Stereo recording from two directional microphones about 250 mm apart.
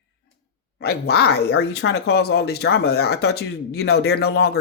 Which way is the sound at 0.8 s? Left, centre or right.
Left.